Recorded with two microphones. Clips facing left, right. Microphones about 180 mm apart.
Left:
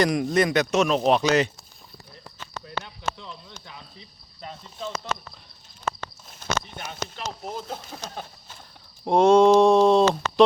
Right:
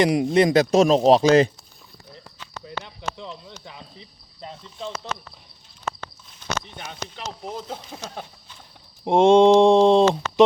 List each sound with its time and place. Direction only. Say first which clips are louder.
0.0 s speech: right 3 dB; 25° right (ahead or behind)
2.6 s a sound: left 1 dB; 20° right (ahead or behind)
5.8 s walk: left 1 dB; 50° left (ahead or behind)
9.0 s mantra: right 2 dB; 25° right (ahead or behind)